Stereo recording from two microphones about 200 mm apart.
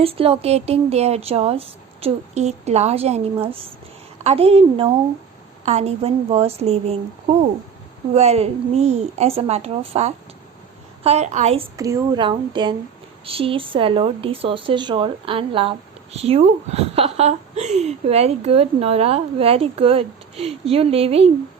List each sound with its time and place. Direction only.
0.0 s a woman's voice: 30° right (ahead or behind)
8.1 s a woman's voice: 30° right (ahead or behind)
11.8 s a woman's voice: 15° right (ahead or behind)